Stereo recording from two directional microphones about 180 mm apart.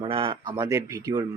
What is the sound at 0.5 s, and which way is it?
Speech, 15° right (ahead or behind).